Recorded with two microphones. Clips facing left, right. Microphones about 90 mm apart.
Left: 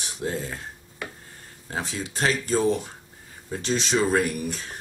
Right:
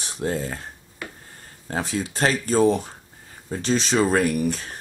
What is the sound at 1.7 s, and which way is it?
Speech, 40° right (ahead or behind).